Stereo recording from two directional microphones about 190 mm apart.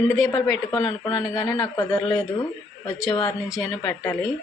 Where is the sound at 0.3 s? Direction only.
20° left (ahead or behind).